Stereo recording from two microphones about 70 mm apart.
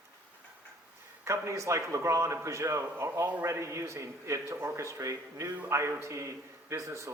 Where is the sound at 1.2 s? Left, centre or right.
Right.